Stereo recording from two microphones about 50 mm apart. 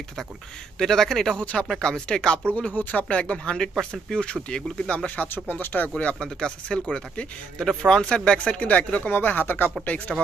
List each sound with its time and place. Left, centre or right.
0.7 s speech: centre
1.4 s speech: left
2.7 s speech: left; by 4.9 s centre
4.9 s speech: left
5.3 s speech: left
6.1 s speech: centre
8.3 s speech: left
9.8 s speech: left